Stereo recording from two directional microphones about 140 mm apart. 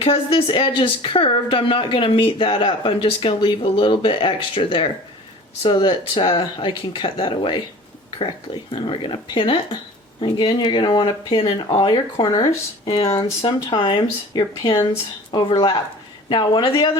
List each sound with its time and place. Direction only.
0.0 s speech: 40° left (ahead or behind)
12.1 s speech: 30° left (ahead or behind)